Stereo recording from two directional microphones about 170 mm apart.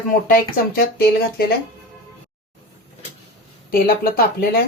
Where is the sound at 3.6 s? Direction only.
60° left (ahead or behind).